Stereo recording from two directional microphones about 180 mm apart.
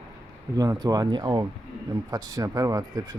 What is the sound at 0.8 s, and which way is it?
Speech, 20° right (ahead or behind).